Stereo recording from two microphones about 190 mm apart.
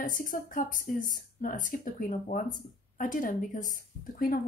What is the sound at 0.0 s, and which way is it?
A woman's voice, 45° left (ahead or behind).